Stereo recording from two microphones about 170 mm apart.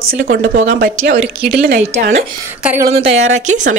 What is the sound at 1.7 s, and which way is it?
Speech, 40° right (ahead or behind).